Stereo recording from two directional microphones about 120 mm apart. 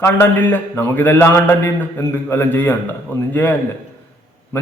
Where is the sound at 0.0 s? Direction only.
15° left (ahead or behind).